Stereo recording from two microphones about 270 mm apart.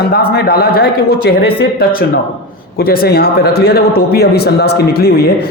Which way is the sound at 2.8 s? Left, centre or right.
Left.